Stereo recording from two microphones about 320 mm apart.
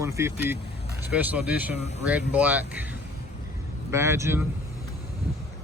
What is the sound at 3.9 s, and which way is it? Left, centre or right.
Speech, centre.